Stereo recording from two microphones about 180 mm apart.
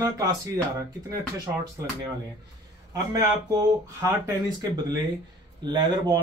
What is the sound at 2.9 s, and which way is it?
Speech, 20° right (ahead or behind).